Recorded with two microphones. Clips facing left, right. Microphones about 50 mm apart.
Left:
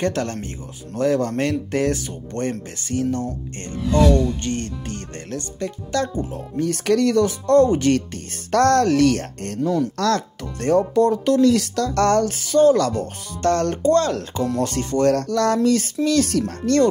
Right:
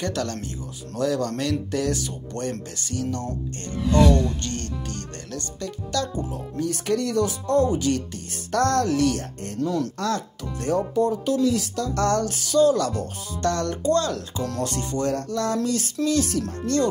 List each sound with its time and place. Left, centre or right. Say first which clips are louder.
0.0 s speech: left 4 dB; left
6.8 s speech: left 6 dB; left
9.6 s speech: left 4 dB; centre
9.9 s speech: left 6 dB; left
15.3 s speech: left 6 dB; left
15.6 s speech: left 6 dB; left